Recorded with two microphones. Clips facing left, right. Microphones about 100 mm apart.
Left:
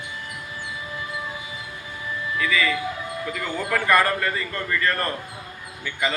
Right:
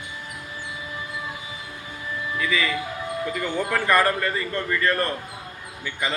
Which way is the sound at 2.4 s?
25° right (ahead or behind).